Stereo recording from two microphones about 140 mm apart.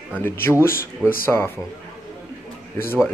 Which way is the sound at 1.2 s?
15° left (ahead or behind).